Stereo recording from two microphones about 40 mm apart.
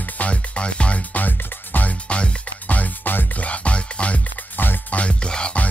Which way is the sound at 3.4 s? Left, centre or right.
Left.